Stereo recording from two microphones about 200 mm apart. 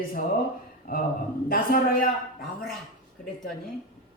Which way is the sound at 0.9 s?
50° left (ahead or behind).